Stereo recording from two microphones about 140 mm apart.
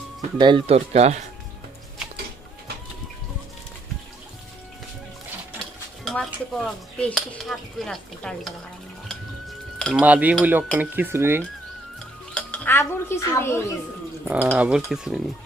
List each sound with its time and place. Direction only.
0.3 s speech: 35° right (ahead or behind); by 1.2 s 50° right (ahead or behind)
6.1 s speech: 5° left (ahead or behind)
9.0 s cutlery: 5° left (ahead or behind)
10.0 s cutlery: 10° right (ahead or behind)
12.3 s speech: 10° left (ahead or behind)
14.3 s cutlery: 10° right (ahead or behind)
14.8 s speech: 5° right (ahead or behind)